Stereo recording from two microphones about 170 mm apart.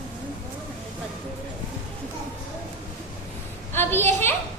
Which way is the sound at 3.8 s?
15° left (ahead or behind).